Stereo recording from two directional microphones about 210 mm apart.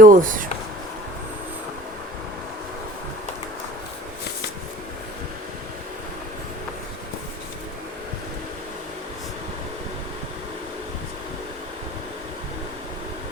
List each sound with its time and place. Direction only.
0.0 s speech: 40° right (ahead or behind)